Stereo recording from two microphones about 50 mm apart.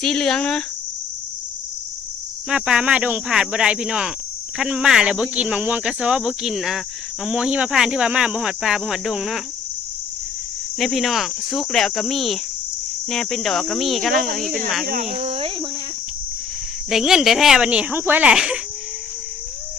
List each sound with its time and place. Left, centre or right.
0.0 s speech: centre
2.5 s speech: centre; by 5.8 s right
5.8 s speech: centre
6.4 s speech: centre
7.3 s speech: centre
10.8 s speech: centre
16.9 s speech: centre
17.6 s speech: right
17.9 s speech: right
18.3 s speech: centre